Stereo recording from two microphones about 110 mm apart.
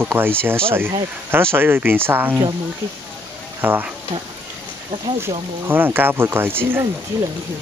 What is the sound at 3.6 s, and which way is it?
Speech, 15° right (ahead or behind).